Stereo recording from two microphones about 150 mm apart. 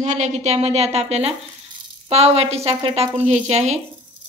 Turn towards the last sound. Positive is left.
turn(degrees=-45)  # may be behind; listen again after turning